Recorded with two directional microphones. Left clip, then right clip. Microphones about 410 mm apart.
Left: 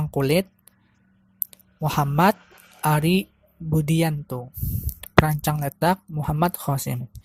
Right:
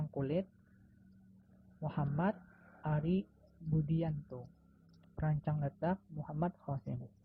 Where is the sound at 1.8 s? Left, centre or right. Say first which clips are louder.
Left 18 dB; left.